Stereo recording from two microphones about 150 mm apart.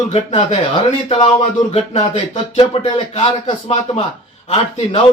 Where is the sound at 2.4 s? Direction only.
35° left (ahead or behind).